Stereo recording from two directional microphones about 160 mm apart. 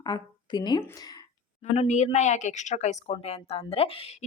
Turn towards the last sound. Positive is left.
turn(degrees=40)  # may be behind; listen again after turning